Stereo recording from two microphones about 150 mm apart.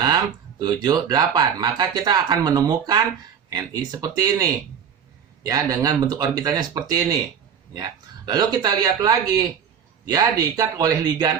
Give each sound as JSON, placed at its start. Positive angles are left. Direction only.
{"t": 0.6, "sound": "speech", "side_deg": -25}